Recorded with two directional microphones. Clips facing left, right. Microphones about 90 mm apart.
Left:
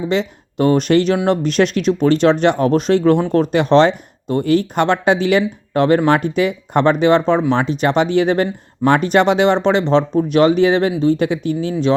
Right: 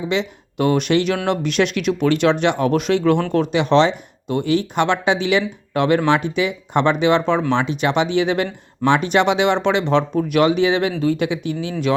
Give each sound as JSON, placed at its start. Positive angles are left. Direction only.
{"t": 0.1, "sound": "speech", "side_deg": 40}